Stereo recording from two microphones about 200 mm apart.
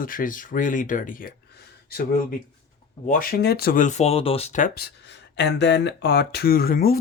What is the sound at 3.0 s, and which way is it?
Speech, 40° left (ahead or behind).